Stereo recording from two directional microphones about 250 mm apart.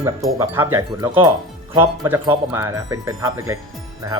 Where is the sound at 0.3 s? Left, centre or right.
Centre.